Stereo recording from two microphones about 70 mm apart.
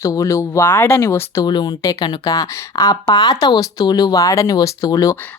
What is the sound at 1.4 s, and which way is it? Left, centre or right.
Speech, left.